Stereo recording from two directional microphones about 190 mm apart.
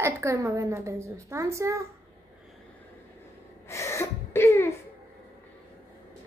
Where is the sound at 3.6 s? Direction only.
15° left (ahead or behind).